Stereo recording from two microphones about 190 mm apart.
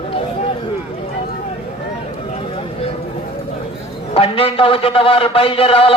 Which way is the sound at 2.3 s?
30° left (ahead or behind).